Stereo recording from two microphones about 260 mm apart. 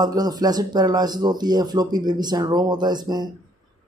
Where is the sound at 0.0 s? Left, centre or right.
Centre.